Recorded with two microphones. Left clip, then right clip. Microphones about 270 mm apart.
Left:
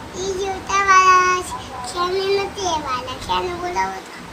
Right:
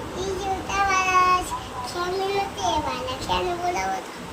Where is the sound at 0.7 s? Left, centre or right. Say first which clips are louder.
Left 9 dB; centre.